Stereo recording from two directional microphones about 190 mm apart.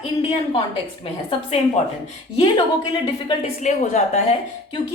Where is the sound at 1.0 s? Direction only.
30° left (ahead or behind).